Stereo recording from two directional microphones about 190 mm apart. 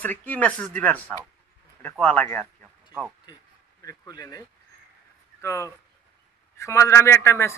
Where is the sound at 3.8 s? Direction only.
20° left (ahead or behind).